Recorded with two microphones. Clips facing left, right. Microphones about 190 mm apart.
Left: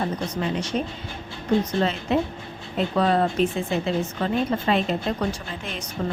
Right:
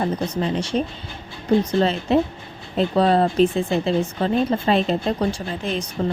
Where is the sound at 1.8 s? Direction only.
30° right (ahead or behind).